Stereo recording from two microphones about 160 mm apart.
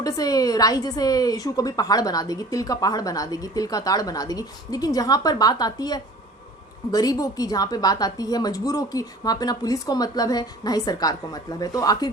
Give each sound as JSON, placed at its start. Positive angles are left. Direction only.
{"t": 0.0, "sound": "a woman's voice", "side_deg": 25}